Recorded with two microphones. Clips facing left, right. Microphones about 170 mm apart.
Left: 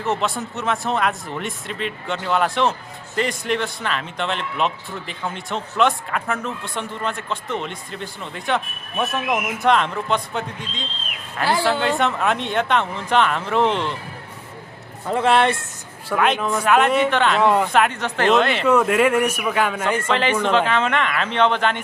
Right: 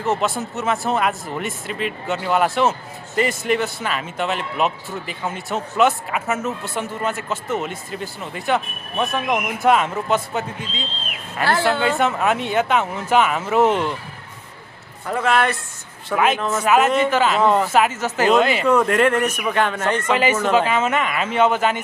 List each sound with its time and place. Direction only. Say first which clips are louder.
0.0 s a man's voice: right 2 dB; centre (ahead or behind)
11.4 s a man's voice: right 1 dB; 15° left (ahead or behind)
11.8 s a man's voice: right 1 dB; centre (ahead or behind)
15.0 s speech: left 2 dB; 25° left (ahead or behind)
16.1 s a man's voice: right 1 dB; 5° right (ahead or behind)
18.7 s a man's voice: left 1 dB; 5° left (ahead or behind)
20.1 s speech: right 2 dB; 10° right (ahead or behind)